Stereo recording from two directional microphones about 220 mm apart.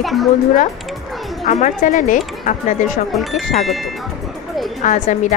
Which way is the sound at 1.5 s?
35° left (ahead or behind).